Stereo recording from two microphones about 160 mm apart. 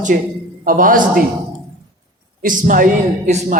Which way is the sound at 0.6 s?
60° right (ahead or behind).